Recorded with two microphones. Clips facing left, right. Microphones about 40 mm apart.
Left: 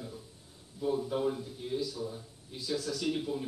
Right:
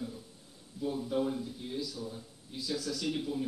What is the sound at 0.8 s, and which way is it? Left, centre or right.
A man's voice, centre.